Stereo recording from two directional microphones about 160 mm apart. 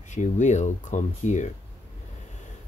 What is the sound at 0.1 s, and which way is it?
Speech, 50° left (ahead or behind).